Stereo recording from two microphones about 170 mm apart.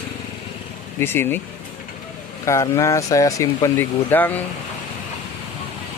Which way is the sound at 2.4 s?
20° left (ahead or behind).